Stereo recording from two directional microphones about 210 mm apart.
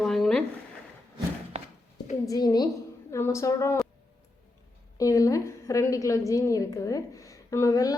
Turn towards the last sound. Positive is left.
turn(degrees=15)  # may be behind; listen again after turning